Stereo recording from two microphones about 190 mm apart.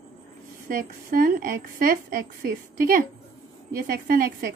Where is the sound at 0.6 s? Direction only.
45° right (ahead or behind).